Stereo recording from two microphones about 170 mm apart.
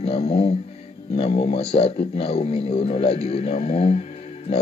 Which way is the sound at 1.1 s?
35° left (ahead or behind).